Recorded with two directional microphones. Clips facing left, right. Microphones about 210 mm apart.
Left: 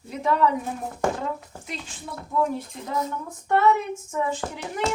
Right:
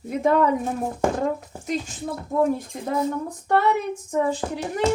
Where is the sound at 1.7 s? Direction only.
45° right (ahead or behind).